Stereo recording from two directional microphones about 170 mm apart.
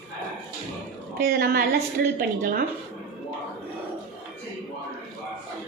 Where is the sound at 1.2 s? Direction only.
65° right (ahead or behind).